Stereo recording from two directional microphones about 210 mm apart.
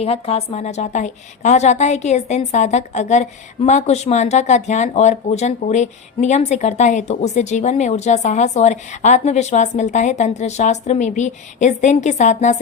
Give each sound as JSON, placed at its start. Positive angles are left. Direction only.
{"t": 0.0, "sound": "a woman's voice", "side_deg": 30}